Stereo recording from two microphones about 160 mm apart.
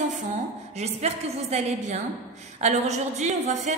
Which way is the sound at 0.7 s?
40° right (ahead or behind).